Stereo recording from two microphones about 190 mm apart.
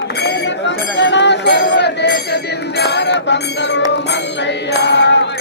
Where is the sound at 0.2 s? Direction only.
65° left (ahead or behind).